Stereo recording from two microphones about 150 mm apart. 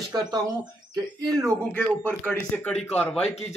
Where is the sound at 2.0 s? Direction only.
15° left (ahead or behind).